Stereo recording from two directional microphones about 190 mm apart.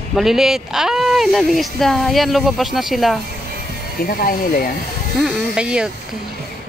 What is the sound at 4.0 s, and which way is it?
Speech, 50° left (ahead or behind).